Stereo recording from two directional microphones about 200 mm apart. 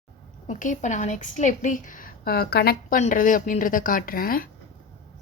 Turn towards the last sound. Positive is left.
turn(degrees=45)  # may be behind; listen again after turning